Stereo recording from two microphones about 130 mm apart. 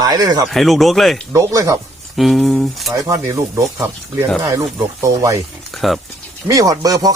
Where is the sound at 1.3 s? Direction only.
25° right (ahead or behind).